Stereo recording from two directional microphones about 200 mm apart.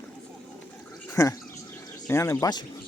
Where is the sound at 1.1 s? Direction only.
15° left (ahead or behind).